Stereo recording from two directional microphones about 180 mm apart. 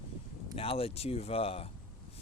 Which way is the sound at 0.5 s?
30° left (ahead or behind).